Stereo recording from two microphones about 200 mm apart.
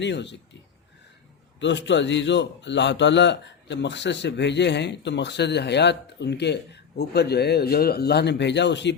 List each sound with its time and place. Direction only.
0.0 s speech: 60° left (ahead or behind)
1.5 s speech: 60° left (ahead or behind)